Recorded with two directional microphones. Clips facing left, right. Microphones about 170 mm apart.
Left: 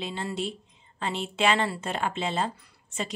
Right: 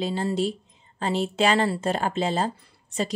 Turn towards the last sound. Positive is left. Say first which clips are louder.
# right 6 dB
turn(degrees=-35)  # may be behind; listen again after turning